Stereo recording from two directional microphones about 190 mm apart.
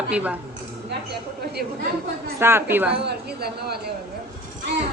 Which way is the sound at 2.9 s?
60° right (ahead or behind).